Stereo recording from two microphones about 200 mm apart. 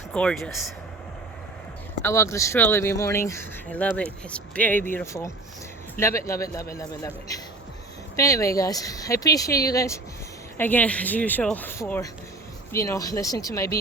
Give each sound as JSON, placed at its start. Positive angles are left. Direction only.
{"t": 0.1, "sound": "speech", "side_deg": 5}
{"t": 2.0, "sound": "speech", "side_deg": 15}